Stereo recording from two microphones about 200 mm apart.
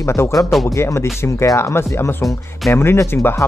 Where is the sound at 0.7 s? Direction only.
15° left (ahead or behind).